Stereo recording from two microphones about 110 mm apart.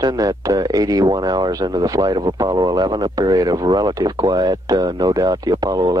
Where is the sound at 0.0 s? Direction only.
35° right (ahead or behind).